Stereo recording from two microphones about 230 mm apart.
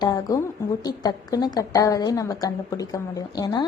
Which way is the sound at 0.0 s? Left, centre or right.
Centre.